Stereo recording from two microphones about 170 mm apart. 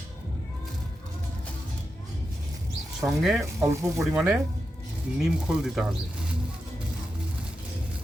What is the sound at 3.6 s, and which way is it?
Speech, 15° right (ahead or behind).